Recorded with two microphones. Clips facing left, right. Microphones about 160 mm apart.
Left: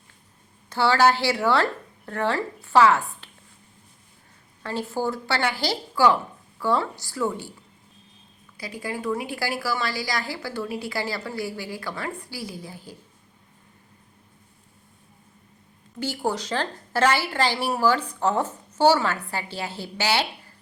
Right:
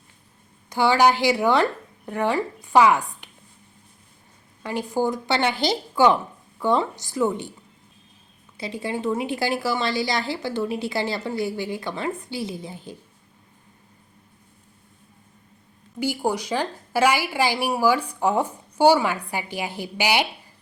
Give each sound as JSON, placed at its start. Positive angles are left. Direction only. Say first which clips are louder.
{"t": 0.7, "sound": "a woman's voice", "louder": "right 1 dB", "side_deg": -15}
{"t": 4.6, "sound": "a woman's voice", "louder": "right 3 dB", "side_deg": -15}
{"t": 8.5, "sound": "a woman's voice", "louder": "right 4 dB", "side_deg": -25}
{"t": 16.0, "sound": "a woman's voice", "louder": "right 3 dB", "side_deg": -10}